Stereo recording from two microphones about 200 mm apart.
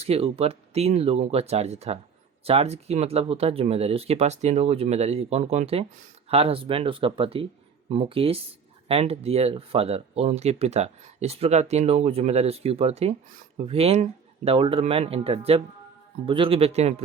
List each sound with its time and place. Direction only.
0.0 s speech: 30° right (ahead or behind)